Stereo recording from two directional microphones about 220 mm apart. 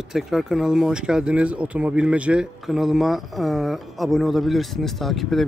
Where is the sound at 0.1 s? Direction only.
Centre (ahead or behind).